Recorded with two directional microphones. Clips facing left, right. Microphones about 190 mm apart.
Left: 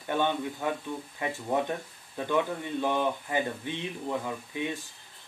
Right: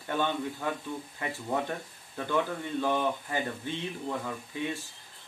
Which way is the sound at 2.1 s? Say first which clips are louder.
Left 2 dB; 15° left (ahead or behind).